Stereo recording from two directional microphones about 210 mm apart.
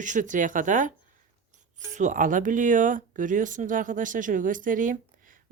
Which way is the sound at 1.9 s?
35° right (ahead or behind).